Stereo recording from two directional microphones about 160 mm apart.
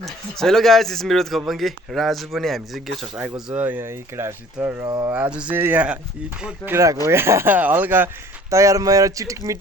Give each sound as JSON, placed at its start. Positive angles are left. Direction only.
{"t": 0.0, "sound": "a man's voice", "side_deg": 0}
{"t": 5.1, "sound": "speech", "side_deg": -5}